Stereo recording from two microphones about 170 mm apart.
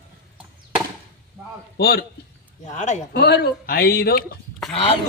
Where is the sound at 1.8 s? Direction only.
65° left (ahead or behind).